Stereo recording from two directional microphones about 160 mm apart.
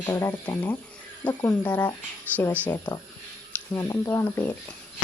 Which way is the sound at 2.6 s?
25° left (ahead or behind).